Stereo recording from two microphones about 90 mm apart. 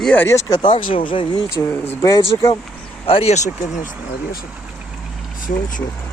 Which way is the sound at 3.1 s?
90° left.